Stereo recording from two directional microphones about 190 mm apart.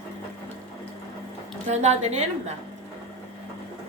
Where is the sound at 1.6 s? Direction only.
35° right (ahead or behind).